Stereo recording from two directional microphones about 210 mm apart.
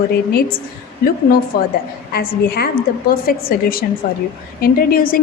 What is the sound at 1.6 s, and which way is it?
A woman's voice, 45° left (ahead or behind).